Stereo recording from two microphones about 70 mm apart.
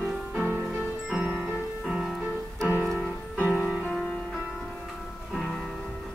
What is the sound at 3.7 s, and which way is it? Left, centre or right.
Music, centre.